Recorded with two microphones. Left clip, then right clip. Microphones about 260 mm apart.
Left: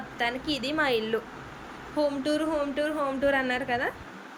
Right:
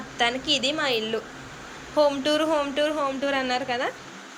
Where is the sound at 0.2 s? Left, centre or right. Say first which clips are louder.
Right 6 dB; centre.